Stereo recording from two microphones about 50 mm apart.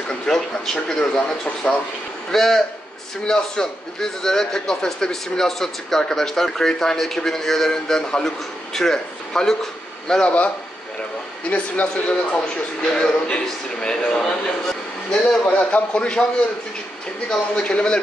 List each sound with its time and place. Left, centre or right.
0.3 s a man's voice: centre
10.2 s speech: left
11.5 s speech: left
15.4 s speech: left
17.3 s speech: left